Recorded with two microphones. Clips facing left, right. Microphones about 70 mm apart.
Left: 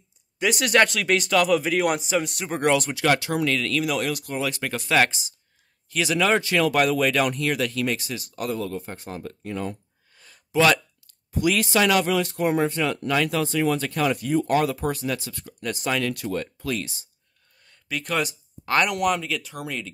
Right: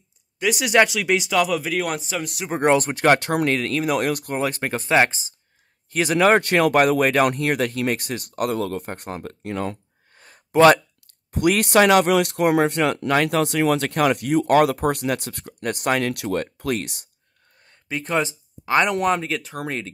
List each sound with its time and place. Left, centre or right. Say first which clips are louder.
0.4 s speech: right 2 dB; centre
2.6 s speech: right 4 dB; right
5.9 s speech: right 5 dB; right
10.1 s a sound: right 4 dB; right
11.3 s speech: right 4 dB; right
17.6 s speech: right 2 dB; right